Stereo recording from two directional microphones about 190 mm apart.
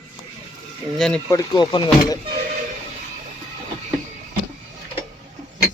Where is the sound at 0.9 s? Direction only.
5° left (ahead or behind).